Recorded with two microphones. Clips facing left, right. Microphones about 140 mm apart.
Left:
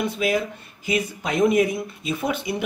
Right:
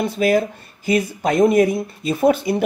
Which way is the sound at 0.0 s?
40° right (ahead or behind).